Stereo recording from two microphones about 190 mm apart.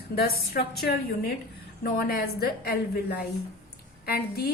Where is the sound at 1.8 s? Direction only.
50° left (ahead or behind).